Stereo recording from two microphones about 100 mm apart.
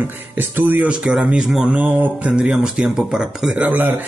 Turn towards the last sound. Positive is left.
turn(degrees=-15)  # may be behind; listen again after turning